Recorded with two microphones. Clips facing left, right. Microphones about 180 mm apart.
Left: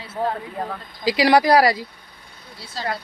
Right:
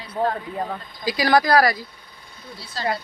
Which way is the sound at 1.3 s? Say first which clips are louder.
Left 1 dB; 30° left (ahead or behind).